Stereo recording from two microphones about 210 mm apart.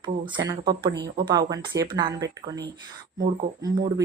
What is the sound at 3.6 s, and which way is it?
Speech, 20° right (ahead or behind).